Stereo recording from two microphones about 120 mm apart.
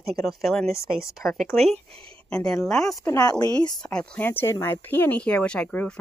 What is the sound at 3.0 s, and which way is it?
Speech, 30° left (ahead or behind).